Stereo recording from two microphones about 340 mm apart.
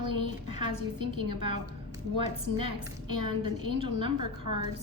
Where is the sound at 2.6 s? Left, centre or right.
Right.